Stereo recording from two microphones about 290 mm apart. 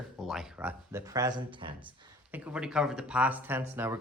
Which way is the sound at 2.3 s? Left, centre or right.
Centre.